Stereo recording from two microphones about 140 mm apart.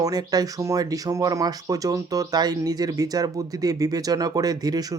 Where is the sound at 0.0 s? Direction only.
25° right (ahead or behind).